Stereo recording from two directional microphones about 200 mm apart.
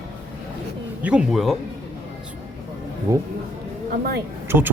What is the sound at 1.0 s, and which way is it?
Speech, 5° right (ahead or behind).